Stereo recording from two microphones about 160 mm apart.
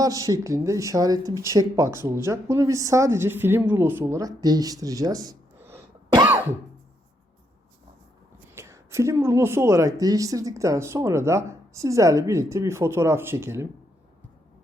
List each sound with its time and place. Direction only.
0.0 s speech: 20° right (ahead or behind)
8.5 s speech: 15° right (ahead or behind)